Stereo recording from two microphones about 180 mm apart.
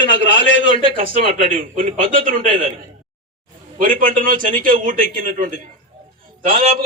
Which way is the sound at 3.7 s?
50° right (ahead or behind).